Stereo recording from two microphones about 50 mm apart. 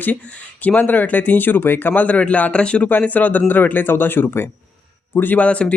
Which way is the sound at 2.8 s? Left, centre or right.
Left.